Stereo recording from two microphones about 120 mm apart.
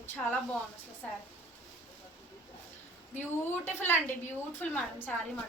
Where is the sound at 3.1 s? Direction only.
15° left (ahead or behind).